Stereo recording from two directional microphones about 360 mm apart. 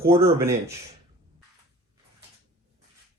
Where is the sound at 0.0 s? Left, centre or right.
Centre.